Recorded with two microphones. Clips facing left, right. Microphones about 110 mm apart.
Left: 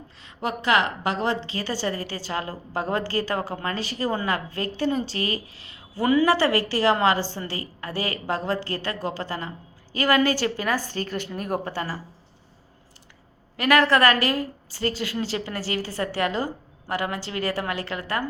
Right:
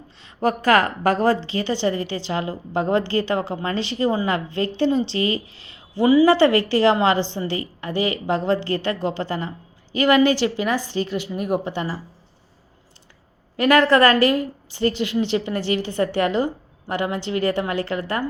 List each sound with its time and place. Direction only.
0.4 s a woman's voice: 45° right (ahead or behind)
1.5 s a woman's voice: 20° right (ahead or behind)
1.9 s a woman's voice: 40° left (ahead or behind)
2.1 s a woman's voice: 20° right (ahead or behind)
10.2 s a woman's voice: 20° right (ahead or behind)
13.6 s a woman's voice: 25° right (ahead or behind)